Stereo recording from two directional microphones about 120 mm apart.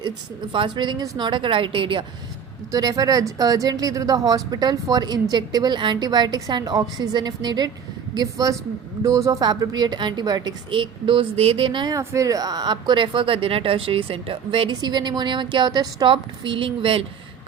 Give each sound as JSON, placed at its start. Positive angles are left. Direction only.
{"t": 0.5, "sound": "a woman's voice", "side_deg": -40}
{"t": 2.7, "sound": "speech", "side_deg": -30}
{"t": 11.9, "sound": "speech", "side_deg": -25}